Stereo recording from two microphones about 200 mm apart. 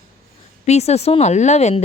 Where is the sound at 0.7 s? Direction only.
30° left (ahead or behind).